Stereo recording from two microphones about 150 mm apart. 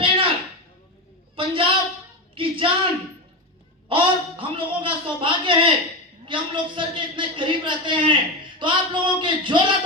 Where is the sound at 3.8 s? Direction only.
35° right (ahead or behind).